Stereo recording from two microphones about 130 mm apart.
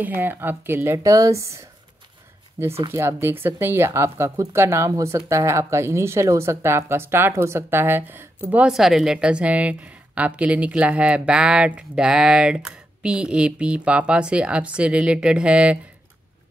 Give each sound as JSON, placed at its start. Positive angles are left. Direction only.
{"t": 0.0, "sound": "speech", "side_deg": -15}